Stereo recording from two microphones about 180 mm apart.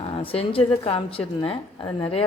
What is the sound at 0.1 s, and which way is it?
A woman's voice, 30° left (ahead or behind).